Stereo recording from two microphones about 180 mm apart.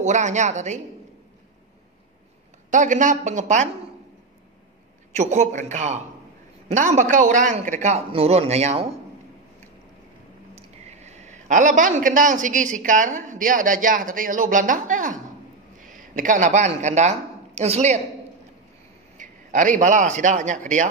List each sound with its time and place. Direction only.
0.0 s a man's voice: 40° right (ahead or behind)
2.7 s speech: 45° right (ahead or behind)
5.2 s a man's voice: 40° right (ahead or behind)
10.5 s a man's voice: 40° right (ahead or behind)
19.1 s a man's voice: 45° right (ahead or behind)